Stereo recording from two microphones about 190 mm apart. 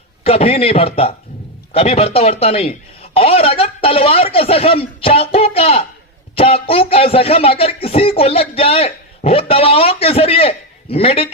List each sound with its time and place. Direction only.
0.3 s speech: 30° left (ahead or behind)